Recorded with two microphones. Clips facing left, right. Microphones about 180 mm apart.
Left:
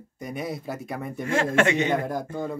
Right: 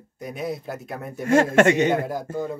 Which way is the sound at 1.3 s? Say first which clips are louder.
Right 6 dB; 45° right (ahead or behind).